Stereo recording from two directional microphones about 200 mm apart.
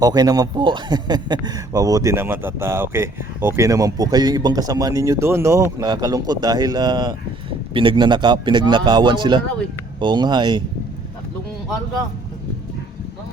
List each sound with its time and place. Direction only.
0.0 s a man's voice: 20° right (ahead or behind)